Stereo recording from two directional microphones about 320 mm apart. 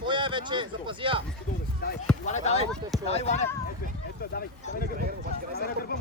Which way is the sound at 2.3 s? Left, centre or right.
Centre.